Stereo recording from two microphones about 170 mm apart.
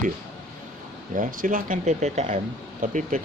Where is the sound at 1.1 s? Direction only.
50° right (ahead or behind).